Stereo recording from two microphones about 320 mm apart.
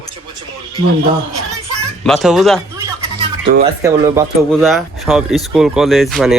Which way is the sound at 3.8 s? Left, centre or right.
Centre.